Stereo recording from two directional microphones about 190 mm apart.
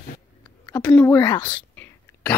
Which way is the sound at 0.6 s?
20° left (ahead or behind).